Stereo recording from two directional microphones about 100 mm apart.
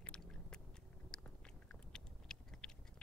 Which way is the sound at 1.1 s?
10° left (ahead or behind).